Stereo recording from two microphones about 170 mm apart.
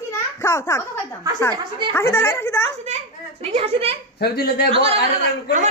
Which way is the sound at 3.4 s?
35° right (ahead or behind).